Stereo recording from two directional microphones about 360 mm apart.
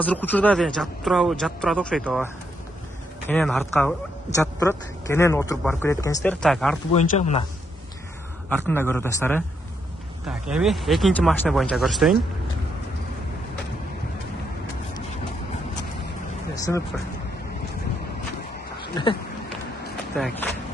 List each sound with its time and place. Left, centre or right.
0.0 s a man's voice: centre
6.9 s a man's voice: centre
8.5 s a man's voice: centre
16.5 s speech: centre
19.0 s a man's voice: centre
20.2 s a man's voice: centre